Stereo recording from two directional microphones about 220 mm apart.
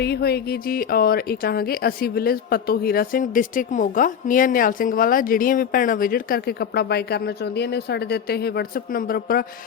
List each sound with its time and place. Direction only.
0.0 s speech: 45° left (ahead or behind)